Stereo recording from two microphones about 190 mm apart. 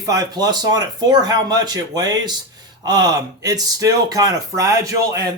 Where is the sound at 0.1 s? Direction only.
20° right (ahead or behind).